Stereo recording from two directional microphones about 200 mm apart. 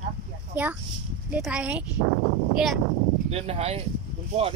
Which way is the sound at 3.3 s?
30° right (ahead or behind).